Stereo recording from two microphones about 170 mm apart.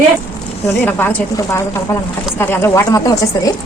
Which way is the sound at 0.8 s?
10° left (ahead or behind).